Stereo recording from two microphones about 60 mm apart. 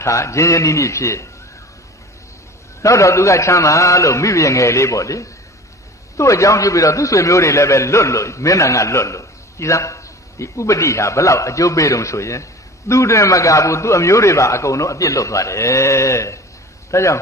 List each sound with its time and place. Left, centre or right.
0.0 s a man's voice: left
2.8 s a man's voice: left